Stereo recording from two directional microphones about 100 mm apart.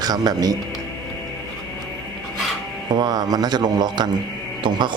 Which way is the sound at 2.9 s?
40° right (ahead or behind).